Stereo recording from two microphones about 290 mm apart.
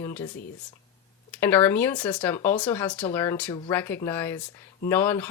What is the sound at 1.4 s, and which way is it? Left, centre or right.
Speech, centre.